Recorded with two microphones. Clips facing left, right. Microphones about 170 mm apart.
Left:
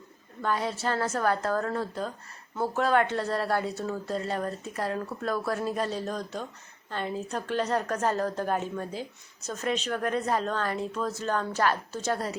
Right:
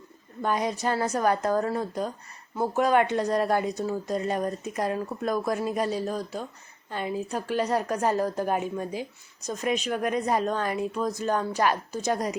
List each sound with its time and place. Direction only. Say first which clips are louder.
0.4 s a woman's voice: right 2 dB; 15° right (ahead or behind)